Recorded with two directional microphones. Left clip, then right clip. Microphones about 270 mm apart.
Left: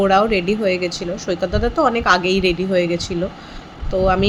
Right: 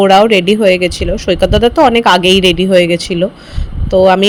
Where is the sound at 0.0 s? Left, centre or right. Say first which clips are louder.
Right 8 dB; right.